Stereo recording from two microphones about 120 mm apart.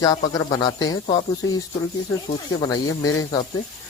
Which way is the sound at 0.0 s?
30° left (ahead or behind).